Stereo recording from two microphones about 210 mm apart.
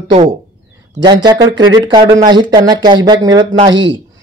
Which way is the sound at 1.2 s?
20° right (ahead or behind).